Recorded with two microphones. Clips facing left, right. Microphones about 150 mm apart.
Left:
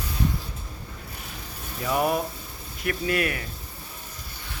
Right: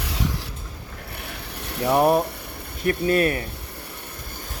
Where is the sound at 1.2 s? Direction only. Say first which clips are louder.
Right 6 dB; 65° right (ahead or behind).